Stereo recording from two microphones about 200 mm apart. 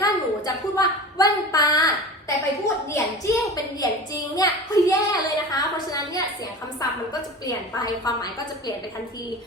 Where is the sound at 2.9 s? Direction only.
15° left (ahead or behind).